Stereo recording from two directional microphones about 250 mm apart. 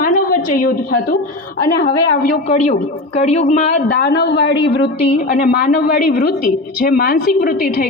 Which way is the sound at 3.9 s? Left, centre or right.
Left.